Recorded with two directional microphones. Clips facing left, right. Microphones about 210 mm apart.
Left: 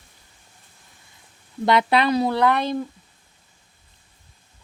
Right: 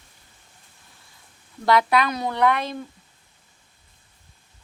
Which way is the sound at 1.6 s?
25° left (ahead or behind).